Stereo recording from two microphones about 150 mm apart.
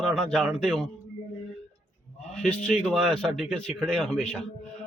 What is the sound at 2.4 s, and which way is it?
A man's voice, 5° left (ahead or behind).